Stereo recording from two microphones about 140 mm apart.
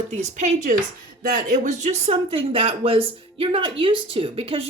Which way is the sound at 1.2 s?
70° right (ahead or behind).